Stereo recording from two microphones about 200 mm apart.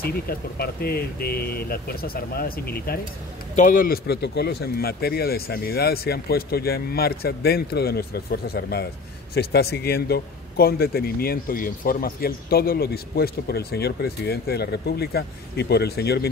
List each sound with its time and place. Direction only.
0.0 s a man's voice: 50° left (ahead or behind)